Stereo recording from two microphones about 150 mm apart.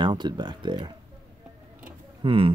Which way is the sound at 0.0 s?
30° right (ahead or behind).